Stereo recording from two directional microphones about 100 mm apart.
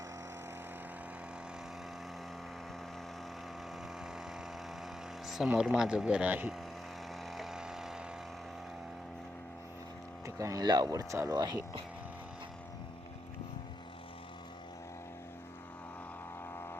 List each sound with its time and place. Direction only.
5.5 s speech: 5° right (ahead or behind)
7.3 s vehicle: 5° right (ahead or behind)
10.2 s speech: 35° right (ahead or behind)
10.9 s speech: 30° right (ahead or behind)